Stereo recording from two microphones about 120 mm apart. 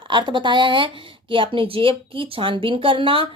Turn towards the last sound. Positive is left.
turn(degrees=-45)  # may be behind; listen again after turning